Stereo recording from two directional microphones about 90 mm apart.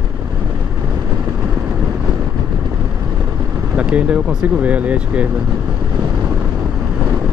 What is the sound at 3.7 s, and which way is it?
Speech, 10° right (ahead or behind).